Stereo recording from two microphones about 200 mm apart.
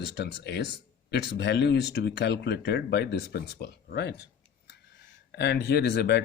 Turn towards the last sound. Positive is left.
turn(degrees=55)  # may be behind; listen again after turning